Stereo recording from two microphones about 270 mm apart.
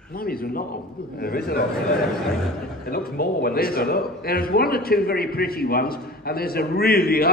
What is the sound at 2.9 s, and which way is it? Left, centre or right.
A man's voice, left.